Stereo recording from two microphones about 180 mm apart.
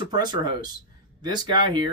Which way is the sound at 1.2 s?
25° right (ahead or behind).